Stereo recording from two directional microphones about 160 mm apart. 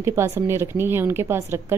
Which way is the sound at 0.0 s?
15° right (ahead or behind).